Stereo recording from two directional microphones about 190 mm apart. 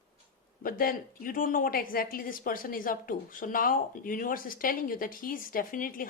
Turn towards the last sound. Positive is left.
turn(degrees=45)  # may be behind; listen again after turning